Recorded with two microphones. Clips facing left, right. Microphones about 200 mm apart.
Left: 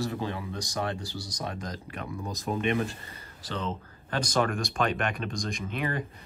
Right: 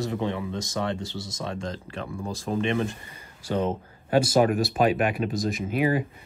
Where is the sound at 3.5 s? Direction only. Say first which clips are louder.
Right 8 dB; 50° right (ahead or behind).